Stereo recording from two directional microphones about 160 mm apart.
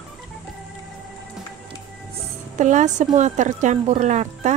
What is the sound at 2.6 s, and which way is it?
Speech, 50° right (ahead or behind).